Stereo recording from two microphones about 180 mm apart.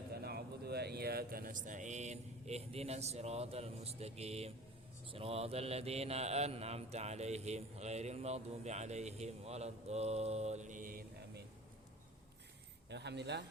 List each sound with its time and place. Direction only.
0.1 s speech: 60° right (ahead or behind); by 4.5 s 35° right (ahead or behind)
5.1 s mantra: 35° right (ahead or behind); by 11.4 s 50° right (ahead or behind)
12.9 s a man's voice: 70° right (ahead or behind)